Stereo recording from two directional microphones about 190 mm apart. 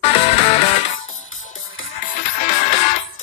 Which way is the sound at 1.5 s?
45° left (ahead or behind).